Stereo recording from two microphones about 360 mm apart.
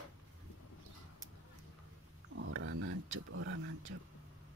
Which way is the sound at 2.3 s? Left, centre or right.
Right.